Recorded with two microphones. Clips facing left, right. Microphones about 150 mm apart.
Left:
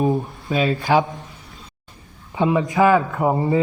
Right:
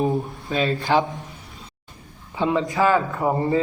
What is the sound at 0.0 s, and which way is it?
Speech, centre (ahead or behind).